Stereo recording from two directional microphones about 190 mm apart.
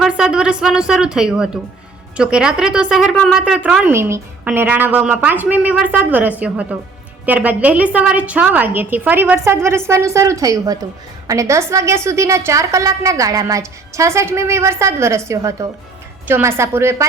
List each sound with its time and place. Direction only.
0.0 s speech: 5° right (ahead or behind)